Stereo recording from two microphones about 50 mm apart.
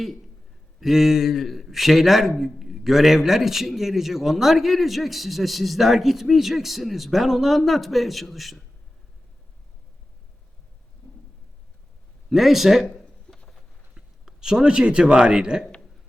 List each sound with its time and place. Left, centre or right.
0.8 s a man's voice: centre
12.3 s a man's voice: centre
12.9 s a sound: centre
13.9 s a man's voice: centre